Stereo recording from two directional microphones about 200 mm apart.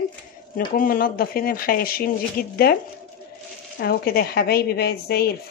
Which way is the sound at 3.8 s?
50° left (ahead or behind).